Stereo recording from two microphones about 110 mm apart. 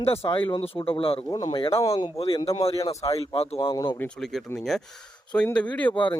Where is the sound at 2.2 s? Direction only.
55° left (ahead or behind).